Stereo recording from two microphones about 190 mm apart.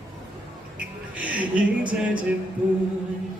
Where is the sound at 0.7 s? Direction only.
5° right (ahead or behind).